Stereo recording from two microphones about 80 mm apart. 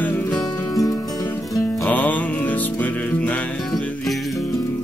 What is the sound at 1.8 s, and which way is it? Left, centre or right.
Music, left.